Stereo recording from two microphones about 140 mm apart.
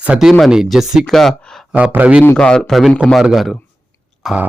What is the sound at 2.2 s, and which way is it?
A man's voice, 10° left (ahead or behind).